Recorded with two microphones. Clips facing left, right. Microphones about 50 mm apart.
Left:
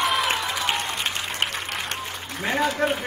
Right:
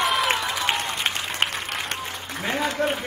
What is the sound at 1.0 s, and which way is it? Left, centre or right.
Applause, right.